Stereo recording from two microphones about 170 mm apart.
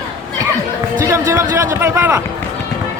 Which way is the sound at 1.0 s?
15° right (ahead or behind).